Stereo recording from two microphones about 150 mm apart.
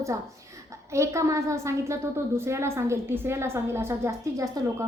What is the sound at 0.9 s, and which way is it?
A woman's voice, 20° right (ahead or behind).